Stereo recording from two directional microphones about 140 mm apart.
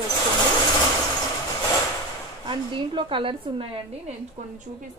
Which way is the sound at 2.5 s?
35° right (ahead or behind).